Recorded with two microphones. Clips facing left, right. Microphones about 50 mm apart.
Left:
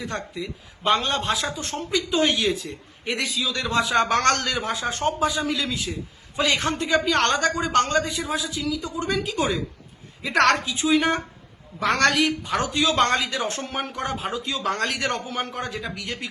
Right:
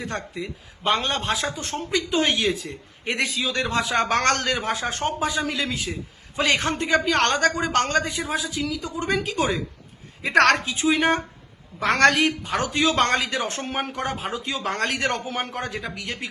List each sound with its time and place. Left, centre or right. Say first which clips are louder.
0.3 s a man's voice: even; right